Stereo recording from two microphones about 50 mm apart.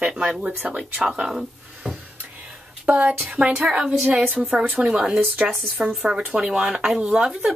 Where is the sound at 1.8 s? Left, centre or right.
Right.